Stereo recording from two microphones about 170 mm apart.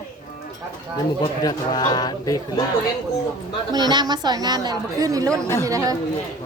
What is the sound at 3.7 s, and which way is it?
A woman's voice, 25° right (ahead or behind).